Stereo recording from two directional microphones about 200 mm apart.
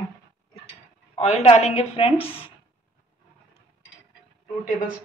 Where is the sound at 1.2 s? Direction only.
35° left (ahead or behind).